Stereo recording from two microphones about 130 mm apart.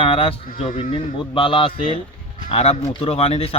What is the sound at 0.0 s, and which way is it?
Speech, 45° left (ahead or behind).